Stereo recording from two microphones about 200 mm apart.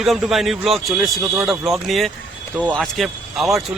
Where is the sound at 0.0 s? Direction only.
Centre (ahead or behind).